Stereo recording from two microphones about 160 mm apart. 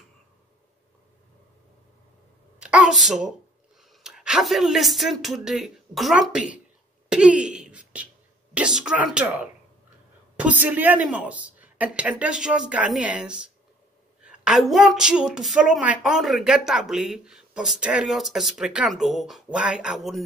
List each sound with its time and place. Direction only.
2.6 s a woman's voice: 5° right (ahead or behind)
7.1 s a sound: 5° right (ahead or behind)
8.5 s a woman's voice: 5° right (ahead or behind)